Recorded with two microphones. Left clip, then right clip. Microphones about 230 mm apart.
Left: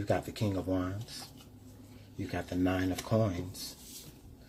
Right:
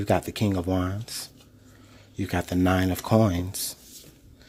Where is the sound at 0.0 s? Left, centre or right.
Right.